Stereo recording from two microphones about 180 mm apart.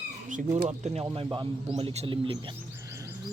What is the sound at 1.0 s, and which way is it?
A man's voice, 25° right (ahead or behind).